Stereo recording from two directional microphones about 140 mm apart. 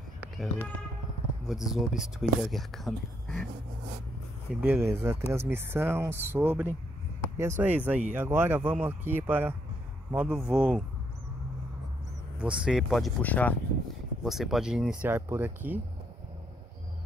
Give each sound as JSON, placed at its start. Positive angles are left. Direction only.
{"t": 1.5, "sound": "speech", "side_deg": -5}
{"t": 4.6, "sound": "speech", "side_deg": -15}
{"t": 12.4, "sound": "speech", "side_deg": -5}
{"t": 13.2, "sound": "speech", "side_deg": 10}
{"t": 14.2, "sound": "speech", "side_deg": 0}